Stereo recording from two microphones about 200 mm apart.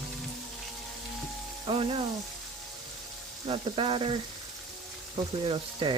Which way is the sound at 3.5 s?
30° right (ahead or behind).